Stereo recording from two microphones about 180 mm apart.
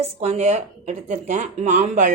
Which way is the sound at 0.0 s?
35° right (ahead or behind).